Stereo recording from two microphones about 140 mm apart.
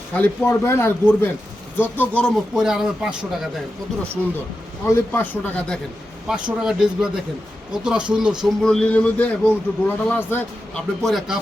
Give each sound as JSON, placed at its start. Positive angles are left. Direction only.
{"t": 0.1, "sound": "a man's voice", "side_deg": 15}
{"t": 4.9, "sound": "a man's voice", "side_deg": 15}
{"t": 6.2, "sound": "speech", "side_deg": -5}
{"t": 8.6, "sound": "a man's voice", "side_deg": 5}
{"t": 11.0, "sound": "speech", "side_deg": 0}